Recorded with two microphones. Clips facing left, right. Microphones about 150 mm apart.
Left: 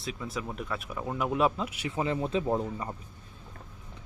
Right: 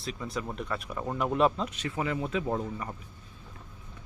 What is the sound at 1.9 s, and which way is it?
Speech, 25° left (ahead or behind).